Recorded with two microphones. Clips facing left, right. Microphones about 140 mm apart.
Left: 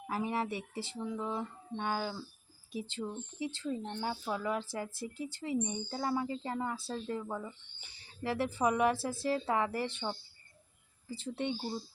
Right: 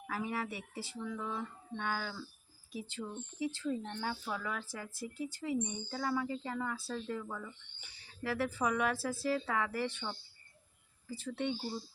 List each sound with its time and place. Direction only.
0.1 s speech: 25° left (ahead or behind)